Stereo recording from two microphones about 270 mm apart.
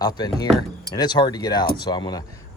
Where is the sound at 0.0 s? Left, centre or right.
Centre.